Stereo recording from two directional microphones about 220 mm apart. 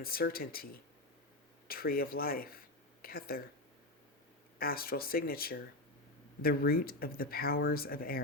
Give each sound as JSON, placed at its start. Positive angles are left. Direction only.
{"t": 0.0, "sound": "speech", "side_deg": 45}
{"t": 4.5, "sound": "speech", "side_deg": 40}